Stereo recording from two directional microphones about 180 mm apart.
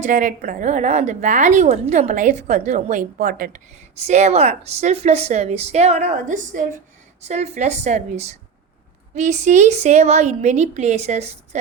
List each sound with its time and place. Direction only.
0.0 s a woman's voice: 45° right (ahead or behind)
3.9 s a woman's voice: 35° right (ahead or behind)